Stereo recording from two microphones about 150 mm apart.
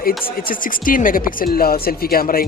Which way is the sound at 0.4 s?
65° left (ahead or behind).